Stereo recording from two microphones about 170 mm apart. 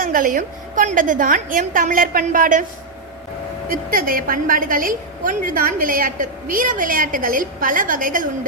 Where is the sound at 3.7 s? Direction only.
55° right (ahead or behind).